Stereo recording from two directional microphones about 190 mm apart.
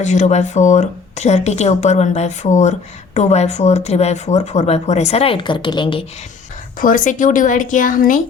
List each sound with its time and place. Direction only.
0.0 s speech: 40° left (ahead or behind)
6.7 s speech: 45° left (ahead or behind)